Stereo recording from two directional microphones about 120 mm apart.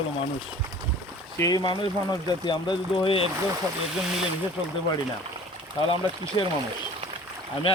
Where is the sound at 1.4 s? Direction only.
35° left (ahead or behind).